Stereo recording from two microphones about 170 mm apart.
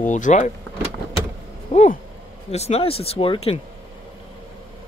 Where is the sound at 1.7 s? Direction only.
35° left (ahead or behind).